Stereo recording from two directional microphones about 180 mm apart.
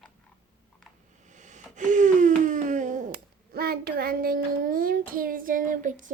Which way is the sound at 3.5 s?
60° right (ahead or behind).